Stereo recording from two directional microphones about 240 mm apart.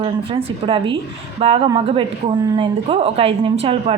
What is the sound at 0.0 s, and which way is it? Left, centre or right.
A woman's voice, right.